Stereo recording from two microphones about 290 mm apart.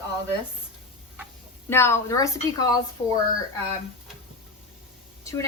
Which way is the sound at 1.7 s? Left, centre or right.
Centre.